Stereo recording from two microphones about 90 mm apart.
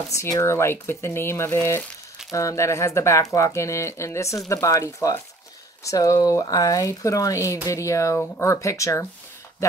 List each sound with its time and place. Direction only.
0.1 s speech: 35° left (ahead or behind)